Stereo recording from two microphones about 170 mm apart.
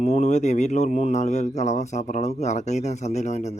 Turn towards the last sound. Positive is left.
turn(degrees=45)  # may be behind; listen again after turning